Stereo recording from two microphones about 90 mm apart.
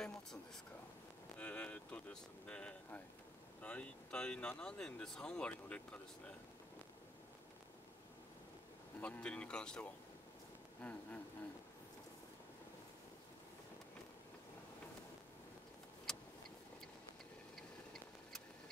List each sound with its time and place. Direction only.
1.4 s speech: 15° left (ahead or behind)
9.0 s speech: 15° left (ahead or behind)
16.1 s vehicle: 5° left (ahead or behind)